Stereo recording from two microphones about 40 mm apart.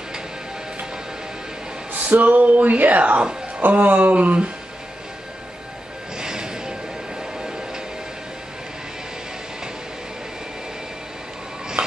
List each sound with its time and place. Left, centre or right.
1.9 s speech: right
3.6 s speech: right
6.1 s music: centre